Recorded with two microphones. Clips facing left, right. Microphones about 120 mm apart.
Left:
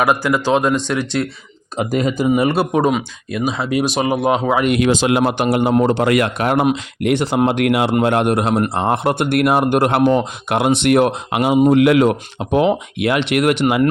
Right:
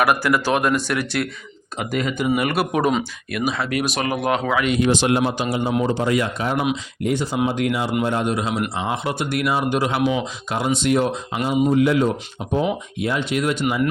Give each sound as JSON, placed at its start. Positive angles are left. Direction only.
{"t": 0.0, "sound": "speech", "side_deg": 20}
{"t": 1.7, "sound": "speech", "side_deg": 35}
{"t": 2.2, "sound": "speech", "side_deg": 25}
{"t": 4.8, "sound": "speech", "side_deg": 90}
{"t": 5.2, "sound": "speech", "side_deg": 65}